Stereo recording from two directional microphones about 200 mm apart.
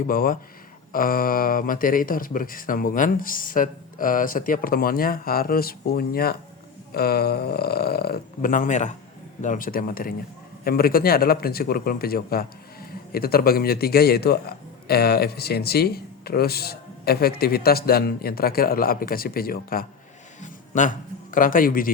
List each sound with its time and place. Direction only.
0.1 s a man's voice: 45° left (ahead or behind)